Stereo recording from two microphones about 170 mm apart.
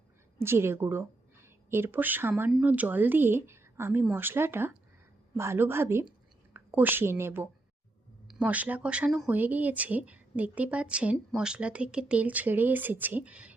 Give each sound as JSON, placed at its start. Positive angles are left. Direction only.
{"t": 0.4, "sound": "a woman's voice", "side_deg": -15}